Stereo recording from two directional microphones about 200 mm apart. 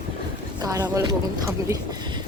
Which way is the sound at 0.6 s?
20° right (ahead or behind).